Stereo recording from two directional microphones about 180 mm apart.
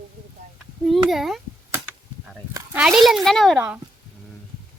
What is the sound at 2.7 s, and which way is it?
Speech, 5° right (ahead or behind).